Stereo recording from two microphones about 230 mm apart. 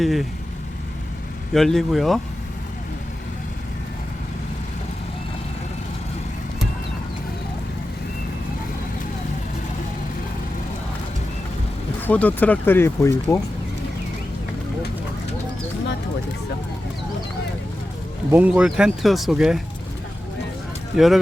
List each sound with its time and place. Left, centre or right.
0.0 s speech: centre
1.5 s speech: centre
12.0 s speech: centre
18.3 s speech: centre
20.9 s speech: centre